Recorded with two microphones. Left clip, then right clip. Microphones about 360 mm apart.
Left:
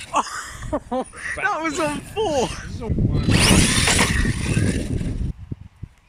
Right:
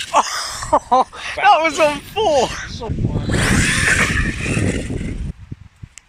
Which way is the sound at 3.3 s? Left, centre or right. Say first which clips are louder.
Right 1 dB; centre.